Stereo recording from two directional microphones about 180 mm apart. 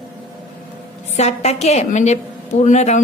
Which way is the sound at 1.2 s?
40° left (ahead or behind).